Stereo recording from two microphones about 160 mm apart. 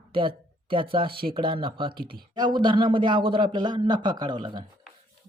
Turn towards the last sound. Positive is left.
turn(degrees=-30)  # may be behind; listen again after turning